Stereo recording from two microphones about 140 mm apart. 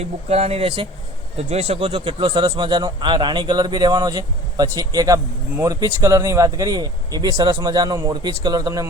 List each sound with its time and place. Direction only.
0.0 s a man's voice: 50° right (ahead or behind); by 8.9 s 25° right (ahead or behind)